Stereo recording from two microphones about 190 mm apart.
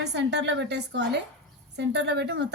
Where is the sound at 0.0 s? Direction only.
65° right (ahead or behind).